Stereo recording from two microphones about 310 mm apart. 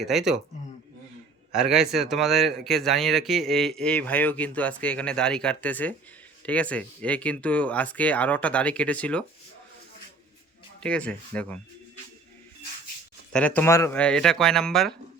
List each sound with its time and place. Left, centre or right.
0.0 s speech: centre
1.5 s speech: centre
10.8 s speech: centre
13.3 s speech: centre